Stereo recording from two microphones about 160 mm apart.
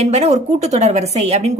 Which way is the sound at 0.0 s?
45° right (ahead or behind).